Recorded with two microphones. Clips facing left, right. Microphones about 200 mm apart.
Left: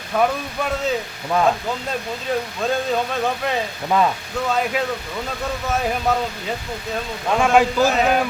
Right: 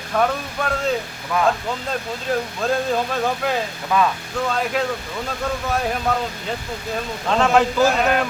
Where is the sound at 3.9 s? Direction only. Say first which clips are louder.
Left 1 dB; 25° left (ahead or behind).